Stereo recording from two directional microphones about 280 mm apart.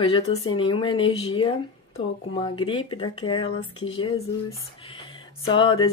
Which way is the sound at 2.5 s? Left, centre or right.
Centre.